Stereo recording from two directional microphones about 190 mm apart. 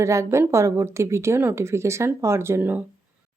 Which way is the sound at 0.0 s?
15° right (ahead or behind).